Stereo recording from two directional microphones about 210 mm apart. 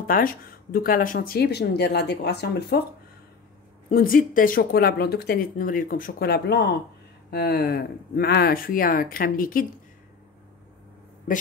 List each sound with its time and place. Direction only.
0.0 s speech: 40° left (ahead or behind)
3.9 s speech: 45° left (ahead or behind)